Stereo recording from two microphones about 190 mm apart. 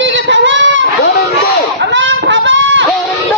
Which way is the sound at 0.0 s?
75° right (ahead or behind).